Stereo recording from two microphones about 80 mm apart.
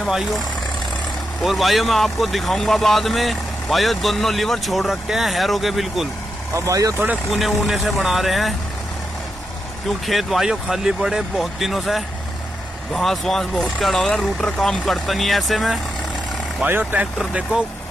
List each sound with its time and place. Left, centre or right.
0.0 s speech: centre
1.4 s speech: centre
6.5 s speech: right
7.2 s speech: centre
10.0 s speech: centre
16.6 s speech: right
17.2 s speech: centre